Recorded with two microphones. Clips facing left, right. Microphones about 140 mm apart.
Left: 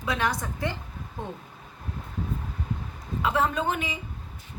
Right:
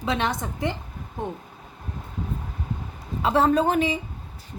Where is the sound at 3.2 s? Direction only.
30° right (ahead or behind).